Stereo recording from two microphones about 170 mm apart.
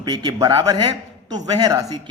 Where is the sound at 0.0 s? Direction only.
25° right (ahead or behind).